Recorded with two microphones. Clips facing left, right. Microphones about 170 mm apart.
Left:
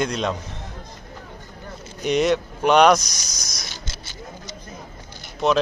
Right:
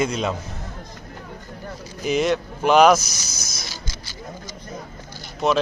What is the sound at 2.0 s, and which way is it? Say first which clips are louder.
Speech: left 1 dB; centre (ahead or behind).